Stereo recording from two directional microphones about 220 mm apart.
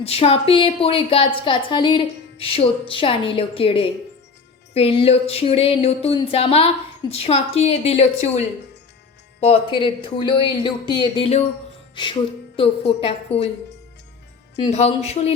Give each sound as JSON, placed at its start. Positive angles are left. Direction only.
{"t": 0.0, "sound": "a woman's voice", "side_deg": 25}
{"t": 9.5, "sound": "a woman's voice", "side_deg": 20}
{"t": 14.6, "sound": "a woman's voice", "side_deg": 30}